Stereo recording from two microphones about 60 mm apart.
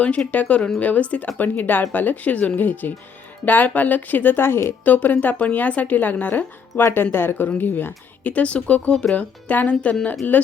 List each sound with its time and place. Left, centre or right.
0.3 s speech: left
4.9 s speech: left
8.3 s speech: left